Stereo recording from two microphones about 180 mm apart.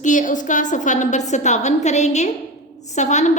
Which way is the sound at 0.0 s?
45° left (ahead or behind).